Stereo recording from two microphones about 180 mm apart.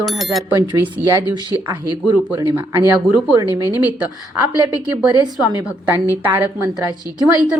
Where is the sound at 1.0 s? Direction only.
10° right (ahead or behind).